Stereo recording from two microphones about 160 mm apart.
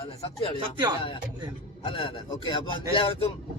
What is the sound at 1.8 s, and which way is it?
A man's voice, 35° left (ahead or behind).